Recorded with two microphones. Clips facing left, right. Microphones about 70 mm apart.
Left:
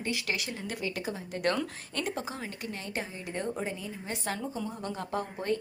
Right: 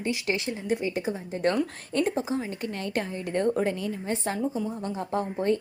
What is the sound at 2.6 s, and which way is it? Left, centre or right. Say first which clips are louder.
A woman's voice: right 6 dB; right.